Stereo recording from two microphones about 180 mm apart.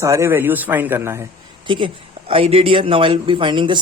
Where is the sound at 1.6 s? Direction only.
25° right (ahead or behind).